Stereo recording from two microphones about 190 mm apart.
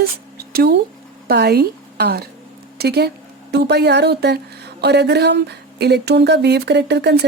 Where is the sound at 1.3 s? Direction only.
55° right (ahead or behind).